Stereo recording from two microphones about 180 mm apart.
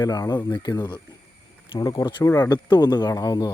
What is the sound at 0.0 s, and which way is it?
Speech, 20° left (ahead or behind).